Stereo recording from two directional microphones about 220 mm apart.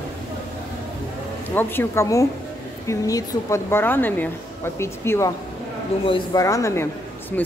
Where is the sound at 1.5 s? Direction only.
10° left (ahead or behind).